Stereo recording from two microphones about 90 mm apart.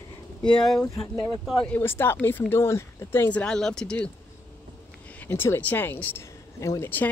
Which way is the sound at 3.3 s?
10° left (ahead or behind).